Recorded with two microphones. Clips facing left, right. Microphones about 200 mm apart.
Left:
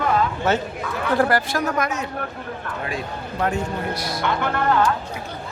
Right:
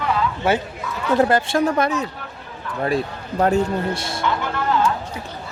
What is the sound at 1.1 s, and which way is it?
A woman's voice, 20° right (ahead or behind).